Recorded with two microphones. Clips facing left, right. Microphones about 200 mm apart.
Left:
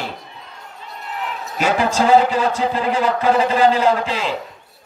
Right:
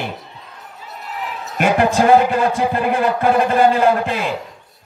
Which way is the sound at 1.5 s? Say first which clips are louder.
Right 3 dB; 60° right (ahead or behind).